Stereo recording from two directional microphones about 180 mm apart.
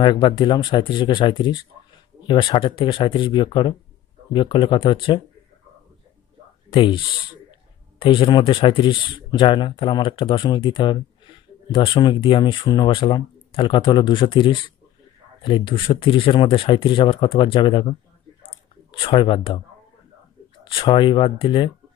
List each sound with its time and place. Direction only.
0.0 s speech: 25° left (ahead or behind)
6.7 s speech: 30° left (ahead or behind)
18.5 s clicking: 30° left (ahead or behind)
20.6 s speech: 25° left (ahead or behind)